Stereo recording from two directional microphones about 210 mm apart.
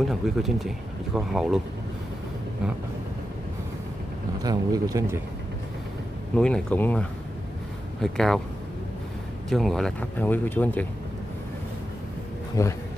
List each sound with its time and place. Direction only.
0.0 s speech: centre (ahead or behind)
4.4 s speech: 15° right (ahead or behind)
6.3 s speech: 5° left (ahead or behind)
9.5 s speech: centre (ahead or behind)
12.6 s speech: 15° left (ahead or behind)